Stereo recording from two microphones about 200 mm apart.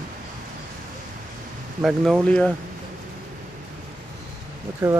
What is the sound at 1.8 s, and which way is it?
Speech, centre (ahead or behind).